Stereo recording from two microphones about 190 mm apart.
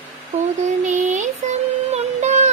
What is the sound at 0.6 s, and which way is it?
Music, 40° right (ahead or behind).